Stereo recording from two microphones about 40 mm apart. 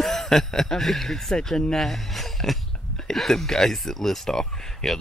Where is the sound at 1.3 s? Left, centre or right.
Centre.